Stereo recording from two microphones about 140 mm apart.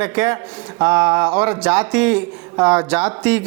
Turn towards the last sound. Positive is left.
turn(degrees=-10)  # may be behind; listen again after turning